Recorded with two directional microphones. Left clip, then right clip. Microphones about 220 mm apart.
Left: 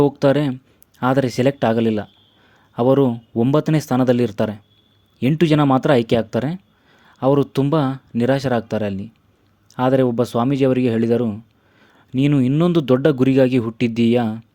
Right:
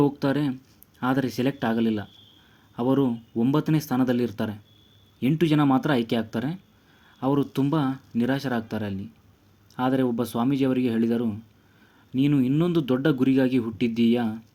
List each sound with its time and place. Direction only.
0.0 s a man's voice: 40° left (ahead or behind)